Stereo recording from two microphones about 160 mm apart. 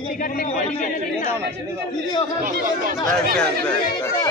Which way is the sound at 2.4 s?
60° right (ahead or behind).